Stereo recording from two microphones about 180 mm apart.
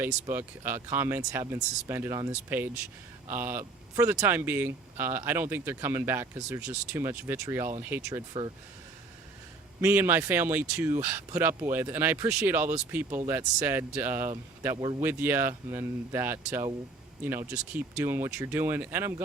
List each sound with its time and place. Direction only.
0.0 s speech: 10° right (ahead or behind)
3.3 s speech: 10° right (ahead or behind)
9.8 s speech: 10° right (ahead or behind)
14.8 s speech: 25° right (ahead or behind)
15.0 s speech: 10° right (ahead or behind)